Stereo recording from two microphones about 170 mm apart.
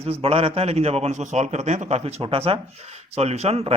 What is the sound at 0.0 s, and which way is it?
Speech, 35° right (ahead or behind).